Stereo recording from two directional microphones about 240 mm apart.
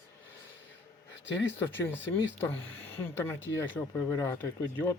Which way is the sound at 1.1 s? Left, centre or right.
Left.